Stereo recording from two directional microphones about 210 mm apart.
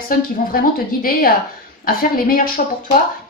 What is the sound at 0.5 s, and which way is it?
Speech, 45° left (ahead or behind).